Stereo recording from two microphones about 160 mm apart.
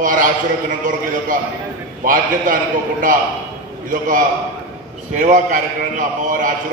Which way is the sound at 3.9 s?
55° right (ahead or behind).